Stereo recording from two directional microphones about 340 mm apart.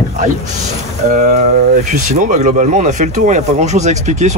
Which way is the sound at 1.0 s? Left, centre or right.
Centre.